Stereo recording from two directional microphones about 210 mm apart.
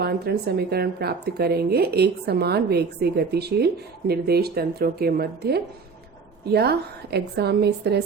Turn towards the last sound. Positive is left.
turn(degrees=-50)  # may be behind; listen again after turning